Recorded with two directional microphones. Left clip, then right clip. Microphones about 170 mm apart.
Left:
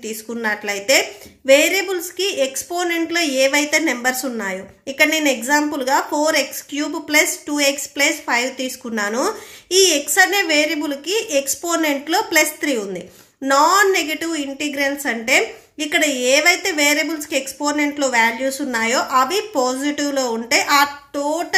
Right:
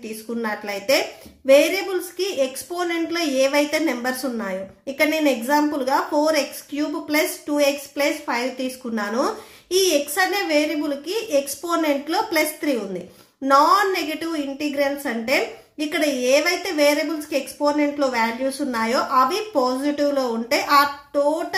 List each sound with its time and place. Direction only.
0.0 s a woman's voice: 25° left (ahead or behind)